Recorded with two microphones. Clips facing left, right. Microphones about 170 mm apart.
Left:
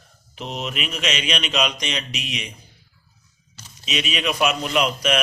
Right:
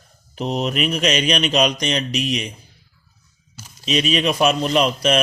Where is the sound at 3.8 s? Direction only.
35° right (ahead or behind).